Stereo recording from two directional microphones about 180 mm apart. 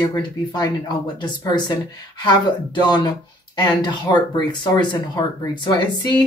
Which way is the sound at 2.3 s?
25° left (ahead or behind).